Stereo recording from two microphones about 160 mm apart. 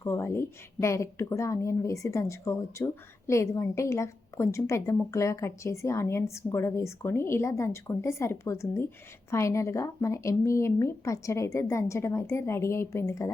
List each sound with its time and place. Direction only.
0.0 s a woman's voice: 15° left (ahead or behind)